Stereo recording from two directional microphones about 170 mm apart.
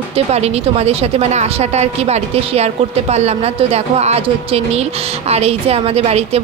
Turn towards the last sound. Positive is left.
turn(degrees=-35)  # may be behind; listen again after turning